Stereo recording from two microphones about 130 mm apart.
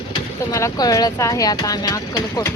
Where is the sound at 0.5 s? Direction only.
25° left (ahead or behind).